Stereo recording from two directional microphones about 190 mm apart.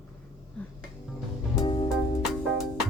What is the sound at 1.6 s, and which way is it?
Music, 25° left (ahead or behind).